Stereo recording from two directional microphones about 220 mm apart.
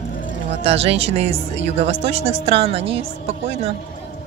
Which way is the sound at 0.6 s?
25° right (ahead or behind).